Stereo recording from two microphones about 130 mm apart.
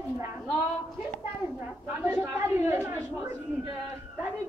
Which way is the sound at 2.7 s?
15° right (ahead or behind).